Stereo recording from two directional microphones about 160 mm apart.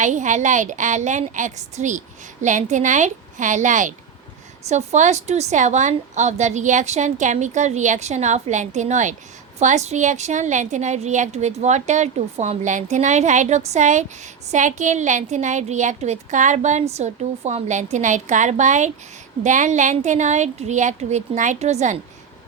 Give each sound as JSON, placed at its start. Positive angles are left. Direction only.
{"t": 0.0, "sound": "a woman's voice", "side_deg": -50}